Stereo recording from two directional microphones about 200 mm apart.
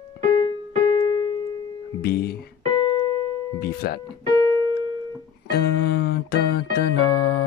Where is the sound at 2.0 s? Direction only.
50° left (ahead or behind).